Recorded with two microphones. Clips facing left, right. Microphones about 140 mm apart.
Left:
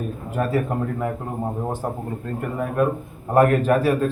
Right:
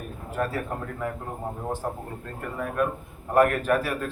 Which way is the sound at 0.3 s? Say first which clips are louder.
Left 6 dB; 20° left (ahead or behind).